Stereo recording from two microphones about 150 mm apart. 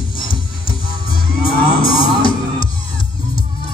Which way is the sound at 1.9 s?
35° left (ahead or behind).